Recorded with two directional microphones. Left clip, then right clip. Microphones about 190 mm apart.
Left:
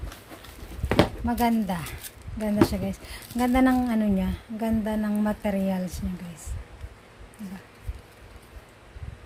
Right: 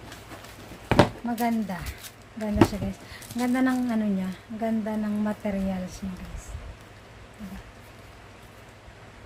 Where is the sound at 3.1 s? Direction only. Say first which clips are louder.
Left 3 dB; 50° left (ahead or behind).